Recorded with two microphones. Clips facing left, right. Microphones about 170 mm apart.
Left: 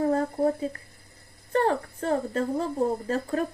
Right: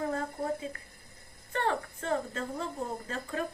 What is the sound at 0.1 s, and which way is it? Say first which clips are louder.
A woman's voice: left 9 dB; 35° left (ahead or behind).